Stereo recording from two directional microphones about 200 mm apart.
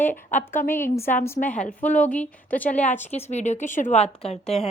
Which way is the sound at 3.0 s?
35° left (ahead or behind).